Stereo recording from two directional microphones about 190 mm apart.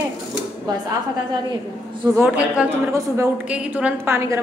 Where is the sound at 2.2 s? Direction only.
5° right (ahead or behind).